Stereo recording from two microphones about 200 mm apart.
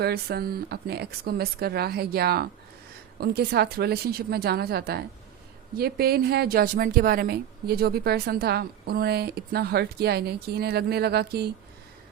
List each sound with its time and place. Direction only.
0.0 s a woman's voice: 50° right (ahead or behind)